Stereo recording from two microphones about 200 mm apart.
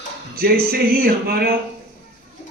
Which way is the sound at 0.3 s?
50° right (ahead or behind).